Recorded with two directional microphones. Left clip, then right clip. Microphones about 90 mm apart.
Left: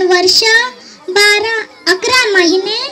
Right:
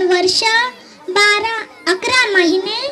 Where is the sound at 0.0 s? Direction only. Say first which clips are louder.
Left 4 dB; 35° right (ahead or behind).